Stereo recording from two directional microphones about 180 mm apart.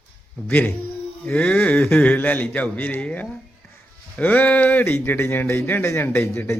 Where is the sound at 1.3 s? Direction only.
5° left (ahead or behind).